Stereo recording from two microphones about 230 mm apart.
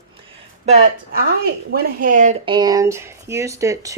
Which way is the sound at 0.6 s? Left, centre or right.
Right.